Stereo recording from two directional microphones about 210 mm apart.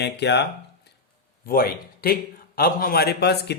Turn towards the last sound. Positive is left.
turn(degrees=50)  # may be behind; listen again after turning